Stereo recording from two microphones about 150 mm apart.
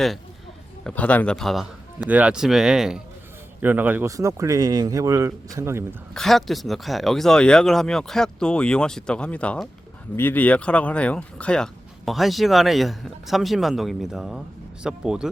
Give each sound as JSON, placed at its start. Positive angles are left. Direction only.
{"t": 0.9, "sound": "speech", "side_deg": 10}
{"t": 6.1, "sound": "speech", "side_deg": 0}